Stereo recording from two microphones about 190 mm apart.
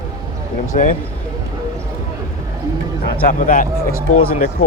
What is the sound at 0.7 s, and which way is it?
Speech, 45° left (ahead or behind).